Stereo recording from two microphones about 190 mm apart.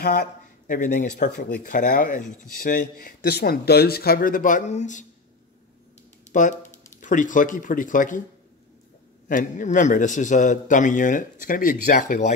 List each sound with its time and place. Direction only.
0.0 s speech: 55° left (ahead or behind)
6.3 s speech: 40° left (ahead or behind)
9.3 s speech: 45° left (ahead or behind)